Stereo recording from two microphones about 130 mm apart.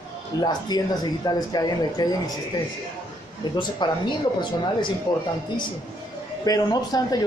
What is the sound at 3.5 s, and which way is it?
Speech, 35° left (ahead or behind).